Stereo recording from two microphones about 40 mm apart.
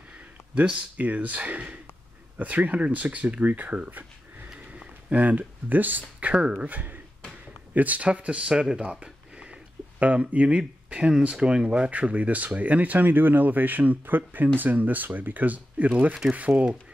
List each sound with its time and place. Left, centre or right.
0.9 s speech: right
5.1 s speech: right
6.1 s speech: right
9.0 s a sound: right
10.9 s speech: right
11.9 s speech: right